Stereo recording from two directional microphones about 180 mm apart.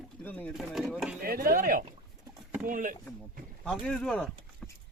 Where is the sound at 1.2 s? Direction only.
55° right (ahead or behind).